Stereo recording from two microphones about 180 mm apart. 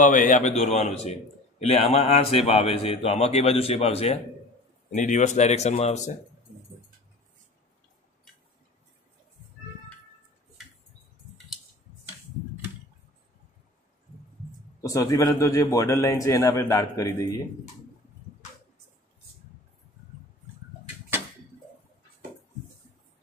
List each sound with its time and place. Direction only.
0.0 s a man's voice: 45° left (ahead or behind)
14.8 s a man's voice: 20° left (ahead or behind)